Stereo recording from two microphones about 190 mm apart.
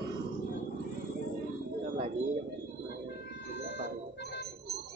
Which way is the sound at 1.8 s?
35° right (ahead or behind).